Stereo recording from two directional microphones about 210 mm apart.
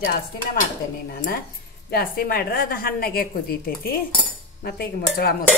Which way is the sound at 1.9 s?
45° left (ahead or behind).